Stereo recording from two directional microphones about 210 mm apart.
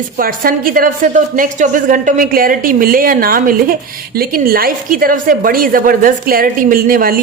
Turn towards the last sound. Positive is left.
turn(degrees=-45)  # may be behind; listen again after turning